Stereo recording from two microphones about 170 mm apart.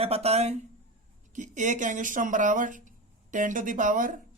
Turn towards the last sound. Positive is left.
turn(degrees=-50)  # may be behind; listen again after turning